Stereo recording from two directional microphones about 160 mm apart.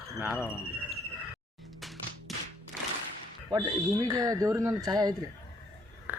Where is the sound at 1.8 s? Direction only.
Centre (ahead or behind).